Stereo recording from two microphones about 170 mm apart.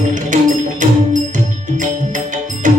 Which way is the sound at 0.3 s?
50° right (ahead or behind).